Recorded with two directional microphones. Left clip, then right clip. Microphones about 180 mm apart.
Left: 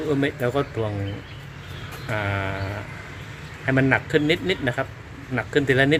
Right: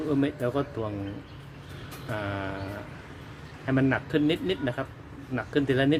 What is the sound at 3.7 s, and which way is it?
Speech, 5° left (ahead or behind).